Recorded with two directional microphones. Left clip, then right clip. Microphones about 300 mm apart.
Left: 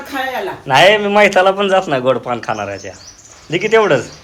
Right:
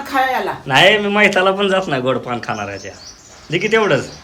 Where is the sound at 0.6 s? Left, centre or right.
Centre.